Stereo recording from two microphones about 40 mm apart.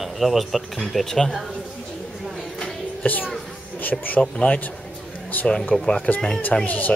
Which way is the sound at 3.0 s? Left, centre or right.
Left.